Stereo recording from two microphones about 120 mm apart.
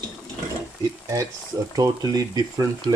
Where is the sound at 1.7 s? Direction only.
30° right (ahead or behind).